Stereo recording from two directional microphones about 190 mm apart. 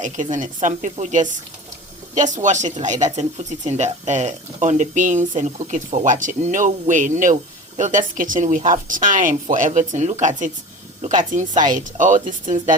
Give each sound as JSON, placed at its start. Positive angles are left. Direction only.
{"t": 0.0, "sound": "a woman's voice", "side_deg": -40}